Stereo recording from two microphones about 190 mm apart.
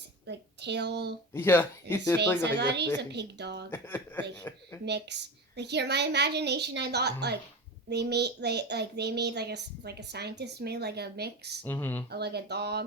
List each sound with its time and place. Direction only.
0.3 s speech: 65° right (ahead or behind)
1.3 s speech: 10° left (ahead or behind)
2.4 s child singing: 65° right (ahead or behind)
3.7 s speech: 10° left (ahead or behind)
4.9 s child singing: 65° right (ahead or behind)
11.6 s speech: 10° left (ahead or behind)
12.1 s child singing: 60° right (ahead or behind)